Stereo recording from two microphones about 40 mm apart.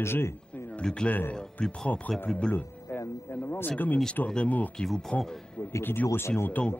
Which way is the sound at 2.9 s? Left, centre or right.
Left.